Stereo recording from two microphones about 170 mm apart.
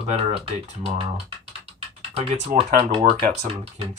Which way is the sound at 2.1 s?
40° right (ahead or behind).